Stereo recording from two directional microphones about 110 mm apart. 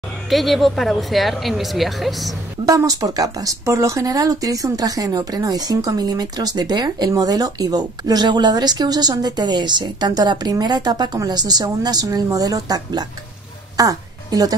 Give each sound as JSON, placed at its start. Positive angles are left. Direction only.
{"t": 0.3, "sound": "speech", "side_deg": 0}
{"t": 2.6, "sound": "a woman's voice", "side_deg": -35}